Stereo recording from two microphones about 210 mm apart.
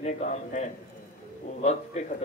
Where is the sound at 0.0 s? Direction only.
35° left (ahead or behind).